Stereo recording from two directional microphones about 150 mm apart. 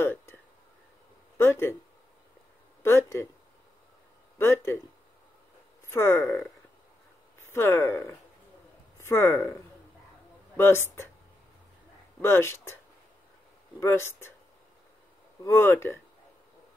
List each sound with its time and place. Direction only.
0.0 s a sound: 15° left (ahead or behind)
1.4 s speech: 15° left (ahead or behind)
2.8 s speech: 15° left (ahead or behind)
4.4 s speech: 15° left (ahead or behind)
5.9 s speech: 15° left (ahead or behind)
7.5 s speech: 15° left (ahead or behind)
10.6 s speech: 15° left (ahead or behind)
12.2 s speech: 15° left (ahead or behind)
13.7 s speech: 15° left (ahead or behind)
15.4 s speech: 15° left (ahead or behind)